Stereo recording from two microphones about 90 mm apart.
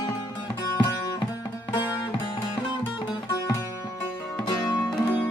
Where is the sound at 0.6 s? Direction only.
45° left (ahead or behind).